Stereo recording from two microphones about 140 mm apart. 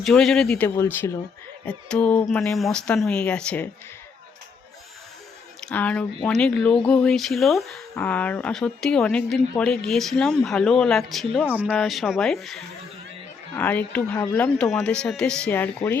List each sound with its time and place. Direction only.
0.0 s speech: 5° left (ahead or behind)
0.8 s speech: 20° left (ahead or behind)
1.6 s speech: 10° left (ahead or behind)
5.5 s speech: 10° left (ahead or behind)
11.4 s speech: 10° right (ahead or behind); by 16.0 s 15° left (ahead or behind)